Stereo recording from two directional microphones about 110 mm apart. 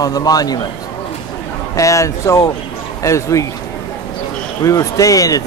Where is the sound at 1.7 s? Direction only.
30° left (ahead or behind).